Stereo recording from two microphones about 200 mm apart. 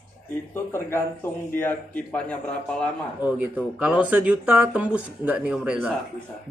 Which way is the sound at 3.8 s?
5° right (ahead or behind).